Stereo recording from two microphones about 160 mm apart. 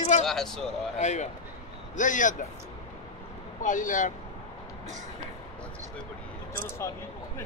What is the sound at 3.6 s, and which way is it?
Speech, 55° left (ahead or behind).